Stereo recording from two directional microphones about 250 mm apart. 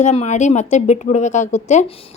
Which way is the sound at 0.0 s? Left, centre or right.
Left.